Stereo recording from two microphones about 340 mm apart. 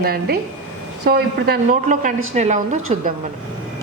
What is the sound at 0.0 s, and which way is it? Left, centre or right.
Speech, right.